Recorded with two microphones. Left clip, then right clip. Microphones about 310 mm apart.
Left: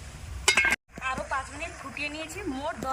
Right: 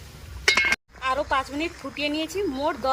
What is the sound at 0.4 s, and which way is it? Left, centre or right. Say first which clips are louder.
Chink: right 3 dB; centre.